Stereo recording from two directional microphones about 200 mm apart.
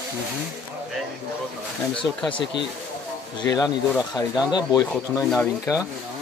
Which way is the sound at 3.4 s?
20° left (ahead or behind).